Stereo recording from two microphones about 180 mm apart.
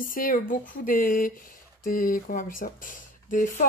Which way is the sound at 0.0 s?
50° left (ahead or behind).